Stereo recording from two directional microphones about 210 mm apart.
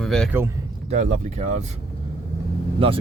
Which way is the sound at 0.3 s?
10° right (ahead or behind).